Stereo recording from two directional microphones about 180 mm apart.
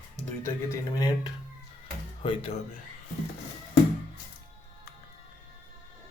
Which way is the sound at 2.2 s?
30° left (ahead or behind).